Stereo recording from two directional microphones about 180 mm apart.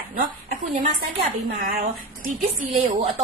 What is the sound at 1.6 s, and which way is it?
A woman's voice, 50° right (ahead or behind).